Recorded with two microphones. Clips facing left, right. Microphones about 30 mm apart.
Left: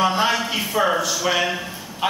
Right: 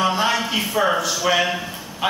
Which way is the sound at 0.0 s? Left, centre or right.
Centre.